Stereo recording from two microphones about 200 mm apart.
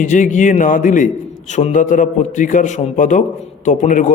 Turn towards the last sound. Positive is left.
turn(degrees=40)  # may be behind; listen again after turning